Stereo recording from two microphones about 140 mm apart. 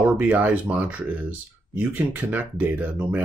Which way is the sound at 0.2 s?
10° right (ahead or behind).